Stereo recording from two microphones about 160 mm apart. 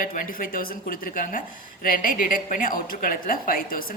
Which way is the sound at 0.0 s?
65° left (ahead or behind).